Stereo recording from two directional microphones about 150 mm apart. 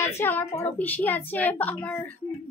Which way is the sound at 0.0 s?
15° left (ahead or behind).